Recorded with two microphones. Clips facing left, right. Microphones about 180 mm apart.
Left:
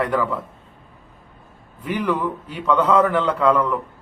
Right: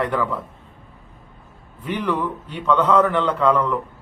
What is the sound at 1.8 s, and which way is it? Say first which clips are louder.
A man's voice: left 1 dB; 10° left (ahead or behind).